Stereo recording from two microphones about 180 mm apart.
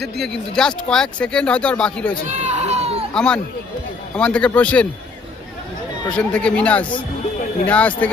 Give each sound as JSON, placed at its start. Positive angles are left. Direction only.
{"t": 0.0, "sound": "speech", "side_deg": 0}
{"t": 2.2, "sound": "speech", "side_deg": -40}
{"t": 3.2, "sound": "a man's voice", "side_deg": 5}
{"t": 6.1, "sound": "a man's voice", "side_deg": 5}